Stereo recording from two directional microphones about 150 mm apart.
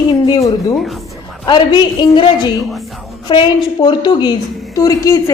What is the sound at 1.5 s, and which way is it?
A woman's voice, 30° left (ahead or behind).